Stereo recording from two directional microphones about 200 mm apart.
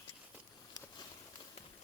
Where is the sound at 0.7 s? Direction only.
20° left (ahead or behind).